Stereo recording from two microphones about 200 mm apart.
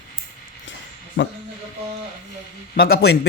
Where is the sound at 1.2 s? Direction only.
65° left (ahead or behind).